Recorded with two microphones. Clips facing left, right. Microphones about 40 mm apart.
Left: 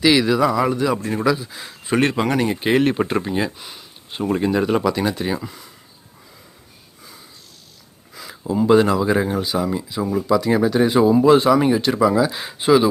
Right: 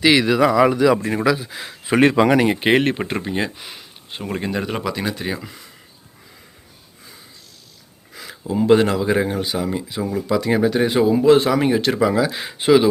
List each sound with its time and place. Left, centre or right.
0.0 s speech: right
0.3 s speech: right
0.5 s speech: right
1.2 s speech: right
2.8 s speech: right
3.6 s speech: right
4.3 s speech: centre
8.1 s a sound: right
8.5 s speech: right
10.0 s speech: centre
10.2 s speech: right